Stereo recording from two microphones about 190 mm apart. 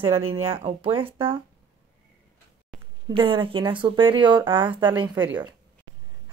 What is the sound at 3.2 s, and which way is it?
Speech, 25° right (ahead or behind).